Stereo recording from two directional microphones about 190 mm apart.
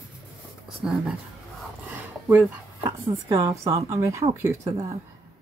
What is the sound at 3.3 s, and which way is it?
A woman's voice, 15° right (ahead or behind).